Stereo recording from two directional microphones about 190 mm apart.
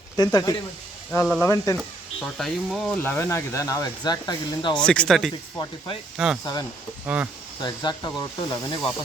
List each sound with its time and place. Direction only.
0.2 s speech: 20° left (ahead or behind)
2.2 s speech: centre (ahead or behind); by 4.8 s 20° left (ahead or behind)
4.8 s speech: 5° left (ahead or behind)
6.4 s speech: 20° left (ahead or behind)
7.1 s speech: 10° right (ahead or behind)
7.6 s speech: 20° left (ahead or behind)